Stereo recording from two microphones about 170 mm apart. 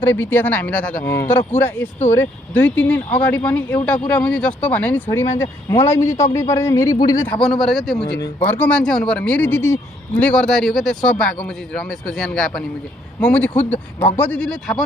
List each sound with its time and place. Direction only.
0.0 s speech: 10° left (ahead or behind)
7.3 s a man's voice: 5° left (ahead or behind)
8.2 s a man's voice: 10° left (ahead or behind)